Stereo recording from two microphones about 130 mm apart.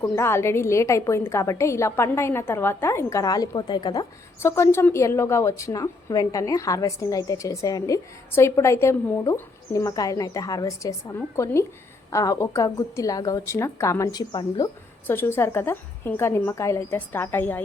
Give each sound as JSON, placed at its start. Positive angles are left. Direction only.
{"t": 0.2, "sound": "a woman's voice", "side_deg": 20}
{"t": 4.4, "sound": "a woman's voice", "side_deg": 20}
{"t": 15.0, "sound": "a woman's voice", "side_deg": 15}